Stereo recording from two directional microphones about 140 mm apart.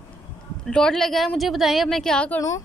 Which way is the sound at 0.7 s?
5° left (ahead or behind).